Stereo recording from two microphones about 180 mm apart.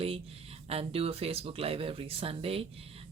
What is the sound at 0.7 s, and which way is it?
Speech, 35° right (ahead or behind).